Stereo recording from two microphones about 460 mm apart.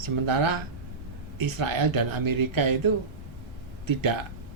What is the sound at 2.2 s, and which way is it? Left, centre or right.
Speech, right.